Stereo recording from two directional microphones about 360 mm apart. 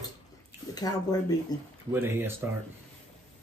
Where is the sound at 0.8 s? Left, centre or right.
Centre.